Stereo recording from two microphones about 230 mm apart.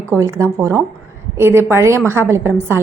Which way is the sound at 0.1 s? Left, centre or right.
Centre.